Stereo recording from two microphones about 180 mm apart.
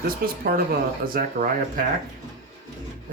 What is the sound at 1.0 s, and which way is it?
Speech, 50° right (ahead or behind).